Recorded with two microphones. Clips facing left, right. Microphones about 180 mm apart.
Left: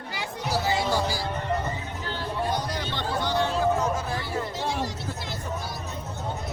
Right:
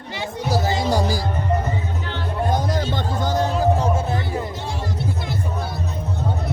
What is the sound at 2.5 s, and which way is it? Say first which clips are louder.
Music: right 7 dB; 45° right (ahead or behind).